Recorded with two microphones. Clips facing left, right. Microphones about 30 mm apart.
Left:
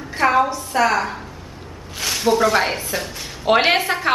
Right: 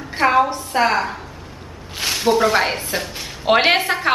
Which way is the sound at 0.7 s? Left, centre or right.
Right.